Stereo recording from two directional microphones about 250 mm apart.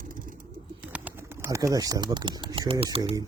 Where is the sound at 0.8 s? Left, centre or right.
Centre.